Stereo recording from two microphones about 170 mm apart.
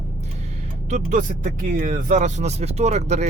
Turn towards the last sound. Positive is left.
turn(degrees=-40)  # may be behind; listen again after turning